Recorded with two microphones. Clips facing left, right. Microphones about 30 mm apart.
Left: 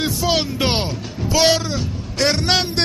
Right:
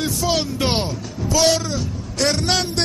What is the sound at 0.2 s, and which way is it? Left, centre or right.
A man's voice, centre.